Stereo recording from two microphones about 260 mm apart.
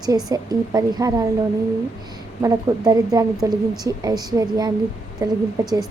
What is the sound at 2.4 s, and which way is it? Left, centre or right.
Speech, centre.